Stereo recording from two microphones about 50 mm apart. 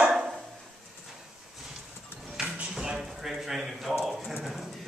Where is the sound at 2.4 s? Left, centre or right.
Centre.